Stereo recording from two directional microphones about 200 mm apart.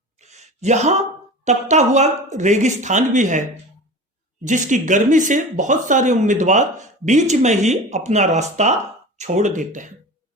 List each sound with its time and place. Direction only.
0.2 s a sound: 35° right (ahead or behind)
1.5 s speech: 35° right (ahead or behind)
4.4 s speech: 40° right (ahead or behind)